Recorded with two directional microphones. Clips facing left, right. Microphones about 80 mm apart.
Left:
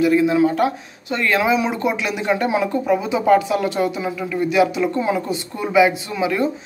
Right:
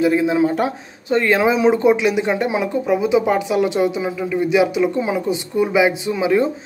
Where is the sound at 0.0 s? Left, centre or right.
Right.